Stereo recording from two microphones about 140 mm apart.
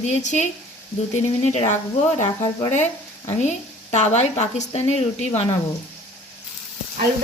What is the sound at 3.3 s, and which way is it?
A woman's voice, 55° left (ahead or behind).